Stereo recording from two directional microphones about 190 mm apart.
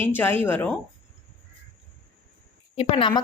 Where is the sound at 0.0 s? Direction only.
10° left (ahead or behind).